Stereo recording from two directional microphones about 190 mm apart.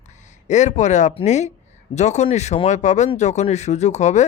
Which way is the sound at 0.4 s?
40° left (ahead or behind).